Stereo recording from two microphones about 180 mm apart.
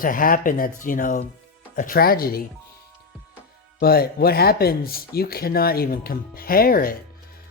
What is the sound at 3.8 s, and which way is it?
Speech, 60° left (ahead or behind).